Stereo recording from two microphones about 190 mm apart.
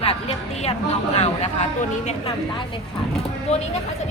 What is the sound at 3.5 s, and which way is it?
Speech, 35° left (ahead or behind).